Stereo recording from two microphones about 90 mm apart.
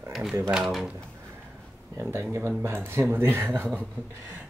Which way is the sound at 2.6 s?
25° right (ahead or behind).